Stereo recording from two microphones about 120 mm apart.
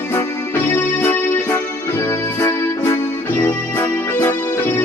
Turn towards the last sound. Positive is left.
turn(degrees=20)  # may be behind; listen again after turning